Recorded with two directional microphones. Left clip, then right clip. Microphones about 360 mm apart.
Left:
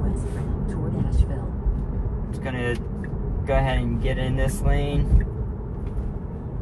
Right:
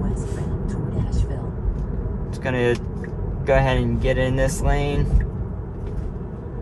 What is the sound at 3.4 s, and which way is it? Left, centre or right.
Speech, right.